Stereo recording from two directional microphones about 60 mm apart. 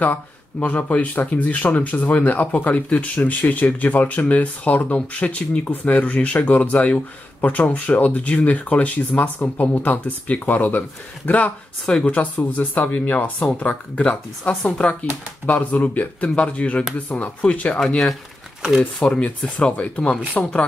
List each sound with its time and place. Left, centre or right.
0.0 s speech: left
17.7 s speech: centre